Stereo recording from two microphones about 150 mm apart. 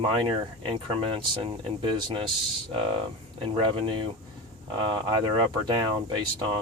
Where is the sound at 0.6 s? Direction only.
35° right (ahead or behind).